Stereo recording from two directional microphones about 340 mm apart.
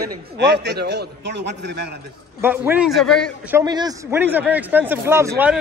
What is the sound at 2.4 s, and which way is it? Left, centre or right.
A man's voice, centre.